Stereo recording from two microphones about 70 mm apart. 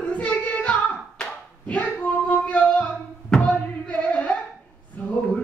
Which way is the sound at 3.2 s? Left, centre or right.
Centre.